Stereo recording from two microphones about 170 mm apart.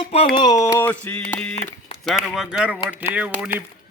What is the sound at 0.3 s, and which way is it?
Speech, 20° left (ahead or behind).